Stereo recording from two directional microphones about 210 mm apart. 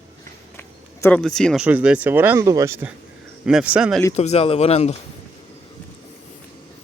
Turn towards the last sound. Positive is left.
turn(degrees=30)  # may be behind; listen again after turning